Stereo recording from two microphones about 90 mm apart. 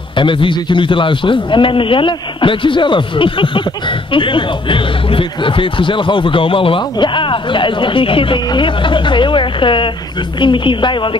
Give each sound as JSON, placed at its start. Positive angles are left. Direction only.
{"t": 0.2, "sound": "a woman's voice", "side_deg": 70}